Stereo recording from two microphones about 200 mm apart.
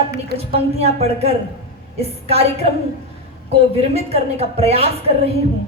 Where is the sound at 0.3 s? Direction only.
30° right (ahead or behind).